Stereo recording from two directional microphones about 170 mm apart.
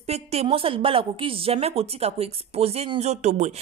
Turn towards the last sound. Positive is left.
turn(degrees=-40)  # may be behind; listen again after turning